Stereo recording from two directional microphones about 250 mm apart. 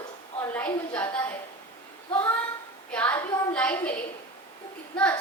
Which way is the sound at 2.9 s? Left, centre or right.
Centre.